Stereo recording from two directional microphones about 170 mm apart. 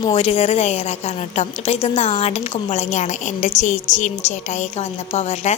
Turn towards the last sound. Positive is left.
turn(degrees=40)  # may be behind; listen again after turning